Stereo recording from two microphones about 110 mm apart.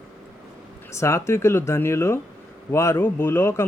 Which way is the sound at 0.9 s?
25° left (ahead or behind).